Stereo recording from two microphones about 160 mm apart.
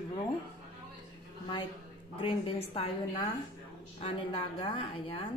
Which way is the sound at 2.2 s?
35° left (ahead or behind).